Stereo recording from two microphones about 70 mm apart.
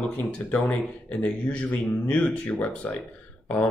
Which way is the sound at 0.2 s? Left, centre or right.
Left.